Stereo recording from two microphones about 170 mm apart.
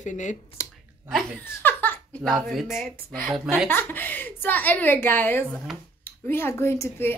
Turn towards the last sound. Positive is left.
turn(degrees=15)  # may be behind; listen again after turning